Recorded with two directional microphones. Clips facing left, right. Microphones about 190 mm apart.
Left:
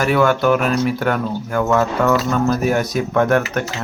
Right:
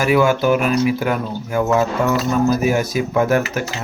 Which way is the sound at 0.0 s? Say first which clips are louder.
Even; 5° right (ahead or behind).